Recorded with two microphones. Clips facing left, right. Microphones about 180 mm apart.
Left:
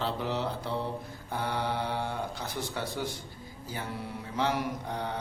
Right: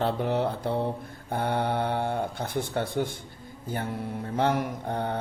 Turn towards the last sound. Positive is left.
turn(degrees=-55)  # may be behind; listen again after turning